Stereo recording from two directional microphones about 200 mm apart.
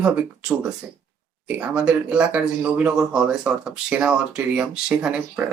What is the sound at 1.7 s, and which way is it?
Speech, 5° right (ahead or behind).